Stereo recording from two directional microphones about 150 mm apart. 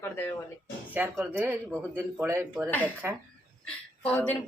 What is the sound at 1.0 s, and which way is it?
Speech, 10° right (ahead or behind).